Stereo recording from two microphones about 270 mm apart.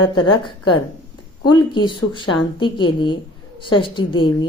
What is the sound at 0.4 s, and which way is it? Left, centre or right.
A woman's voice, centre.